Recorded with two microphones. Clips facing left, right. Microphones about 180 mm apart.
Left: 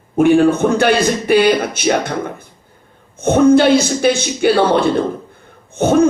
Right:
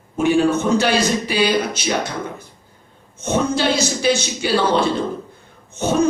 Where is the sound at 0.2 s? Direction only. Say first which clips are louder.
Left 6 dB; 55° left (ahead or behind).